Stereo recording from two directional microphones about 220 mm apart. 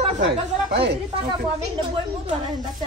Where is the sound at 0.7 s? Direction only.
50° right (ahead or behind).